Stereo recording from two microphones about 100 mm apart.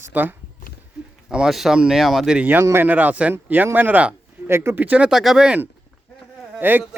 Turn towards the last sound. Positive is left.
turn(degrees=-20)  # may be behind; listen again after turning